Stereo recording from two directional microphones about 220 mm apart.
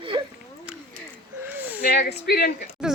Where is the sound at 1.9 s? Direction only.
45° left (ahead or behind).